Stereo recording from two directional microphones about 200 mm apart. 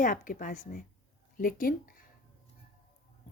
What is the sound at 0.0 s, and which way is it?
A woman's voice, 40° left (ahead or behind).